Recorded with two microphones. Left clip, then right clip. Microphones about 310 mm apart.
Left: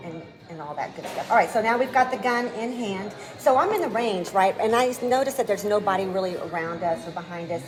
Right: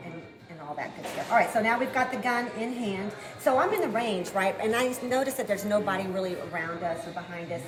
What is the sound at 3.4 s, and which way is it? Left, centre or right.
A woman's voice, centre.